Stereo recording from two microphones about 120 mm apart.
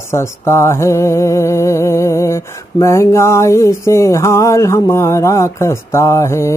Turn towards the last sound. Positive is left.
turn(degrees=25)  # may be behind; listen again after turning